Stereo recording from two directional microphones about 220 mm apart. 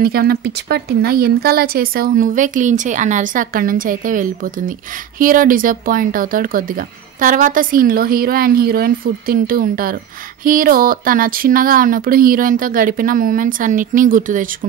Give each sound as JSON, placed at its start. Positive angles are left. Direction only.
{"t": 0.0, "sound": "speech", "side_deg": -45}